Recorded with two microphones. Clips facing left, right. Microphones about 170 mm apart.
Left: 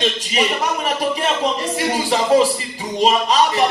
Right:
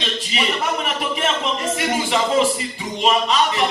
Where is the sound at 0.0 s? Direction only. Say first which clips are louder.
Left 4 dB; 45° left (ahead or behind).